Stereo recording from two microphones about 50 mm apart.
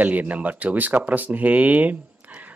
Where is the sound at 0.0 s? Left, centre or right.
Right.